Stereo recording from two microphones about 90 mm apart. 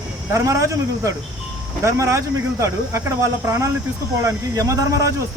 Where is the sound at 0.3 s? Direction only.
35° right (ahead or behind).